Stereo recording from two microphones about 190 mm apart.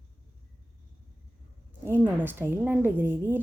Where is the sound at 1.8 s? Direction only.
10° right (ahead or behind).